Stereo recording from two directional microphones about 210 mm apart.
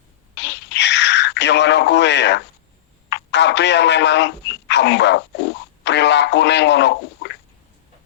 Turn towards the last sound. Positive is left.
turn(degrees=55)  # may be behind; listen again after turning